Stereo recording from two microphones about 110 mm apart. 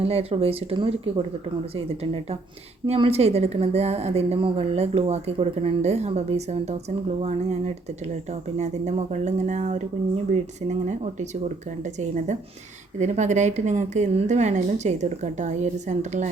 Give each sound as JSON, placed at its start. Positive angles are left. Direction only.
{"t": 0.0, "sound": "speech", "side_deg": -60}
{"t": 2.8, "sound": "speech", "side_deg": -65}
{"t": 4.4, "sound": "speech", "side_deg": -60}
{"t": 7.2, "sound": "speech", "side_deg": -90}